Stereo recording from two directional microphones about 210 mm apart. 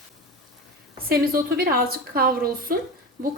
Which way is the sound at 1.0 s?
45° right (ahead or behind).